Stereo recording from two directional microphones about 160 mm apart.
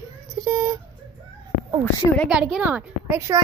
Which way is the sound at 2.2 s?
5° right (ahead or behind).